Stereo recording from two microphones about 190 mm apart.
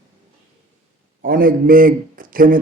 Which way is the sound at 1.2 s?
45° right (ahead or behind).